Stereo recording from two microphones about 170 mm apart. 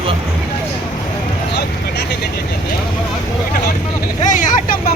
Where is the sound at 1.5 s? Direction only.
80° left.